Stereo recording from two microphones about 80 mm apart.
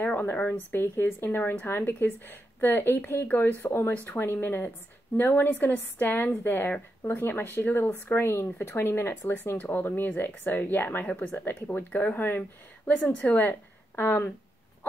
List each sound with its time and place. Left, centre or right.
0.0 s speech: left